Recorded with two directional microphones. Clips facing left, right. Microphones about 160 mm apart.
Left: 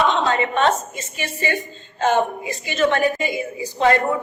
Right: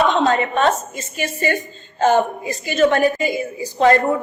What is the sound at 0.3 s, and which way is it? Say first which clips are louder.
A woman's voice: right 2 dB; 40° right (ahead or behind).